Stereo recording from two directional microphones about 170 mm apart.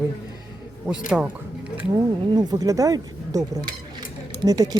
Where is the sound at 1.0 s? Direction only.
5° right (ahead or behind).